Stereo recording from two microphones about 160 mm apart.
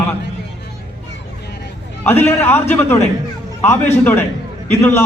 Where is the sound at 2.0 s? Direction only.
15° left (ahead or behind).